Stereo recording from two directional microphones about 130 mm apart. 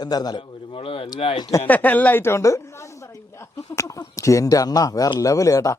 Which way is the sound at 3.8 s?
25° left (ahead or behind).